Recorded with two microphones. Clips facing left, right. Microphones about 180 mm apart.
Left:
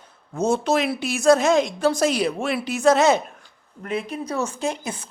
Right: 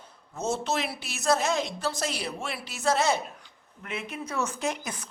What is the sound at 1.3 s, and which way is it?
Speech, 90° left.